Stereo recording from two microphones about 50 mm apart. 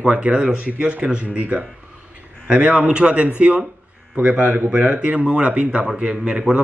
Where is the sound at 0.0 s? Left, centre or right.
Right.